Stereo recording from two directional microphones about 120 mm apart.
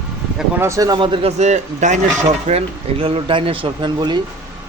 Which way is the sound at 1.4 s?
75° right (ahead or behind).